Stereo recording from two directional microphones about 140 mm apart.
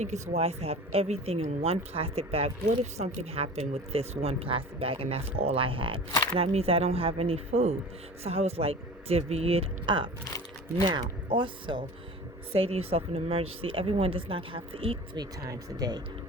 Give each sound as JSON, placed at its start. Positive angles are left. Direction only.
{"t": 0.0, "sound": "speech", "side_deg": -55}